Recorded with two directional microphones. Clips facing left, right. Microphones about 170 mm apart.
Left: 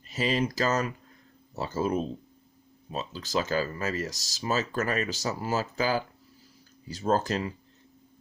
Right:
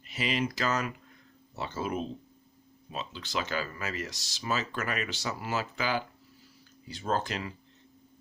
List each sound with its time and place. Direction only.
0.0 s speech: 40° left (ahead or behind)